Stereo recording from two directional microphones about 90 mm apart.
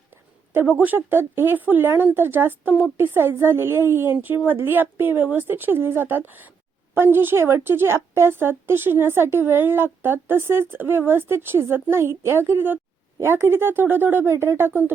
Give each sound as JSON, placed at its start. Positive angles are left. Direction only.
{"t": 0.1, "sound": "a woman's voice", "side_deg": -20}